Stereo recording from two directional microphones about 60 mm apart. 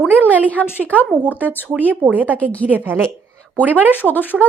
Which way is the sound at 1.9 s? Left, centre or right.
Right.